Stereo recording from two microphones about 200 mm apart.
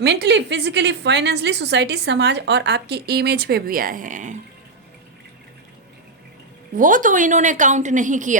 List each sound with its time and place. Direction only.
0.0 s a woman's voice: 55° right (ahead or behind); by 4.4 s 40° right (ahead or behind)
6.7 s a woman's voice: 40° right (ahead or behind)